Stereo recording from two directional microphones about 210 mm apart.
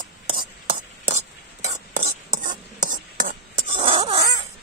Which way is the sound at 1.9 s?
40° right (ahead or behind).